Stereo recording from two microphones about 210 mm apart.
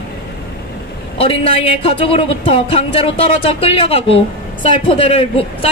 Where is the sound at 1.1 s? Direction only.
25° left (ahead or behind).